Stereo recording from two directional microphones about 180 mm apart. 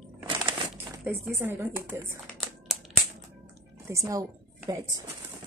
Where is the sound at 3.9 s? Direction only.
15° right (ahead or behind).